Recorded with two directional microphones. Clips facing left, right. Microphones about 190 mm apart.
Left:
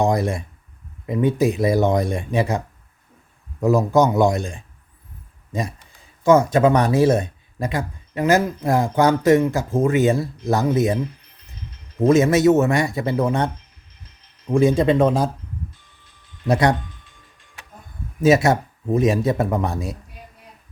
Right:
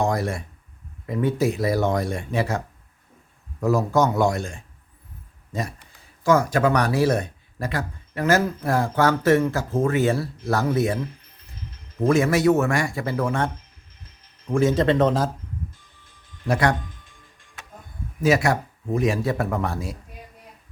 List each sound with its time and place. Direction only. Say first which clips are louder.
0.0 s speech: left 4 dB; 20° left (ahead or behind)
3.6 s speech: left 4 dB; 15° left (ahead or behind)
14.5 s speech: left 3 dB; 15° left (ahead or behind)
16.5 s speech: left 3 dB; 20° left (ahead or behind)
18.2 s speech: left 4 dB; 25° left (ahead or behind)